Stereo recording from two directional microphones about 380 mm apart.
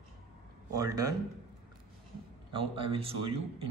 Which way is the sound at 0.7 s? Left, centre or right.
Centre.